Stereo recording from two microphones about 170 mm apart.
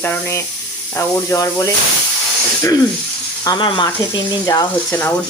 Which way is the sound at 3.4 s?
25° left (ahead or behind).